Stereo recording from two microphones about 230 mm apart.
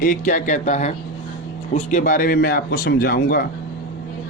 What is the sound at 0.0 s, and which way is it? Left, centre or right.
A man's voice, left.